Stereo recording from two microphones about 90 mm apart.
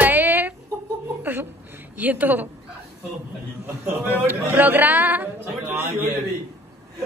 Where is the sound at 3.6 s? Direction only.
20° right (ahead or behind).